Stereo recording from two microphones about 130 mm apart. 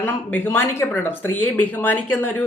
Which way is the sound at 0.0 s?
15° left (ahead or behind).